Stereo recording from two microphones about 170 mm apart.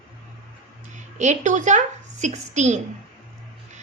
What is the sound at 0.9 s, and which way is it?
A woman's voice, 45° right (ahead or behind).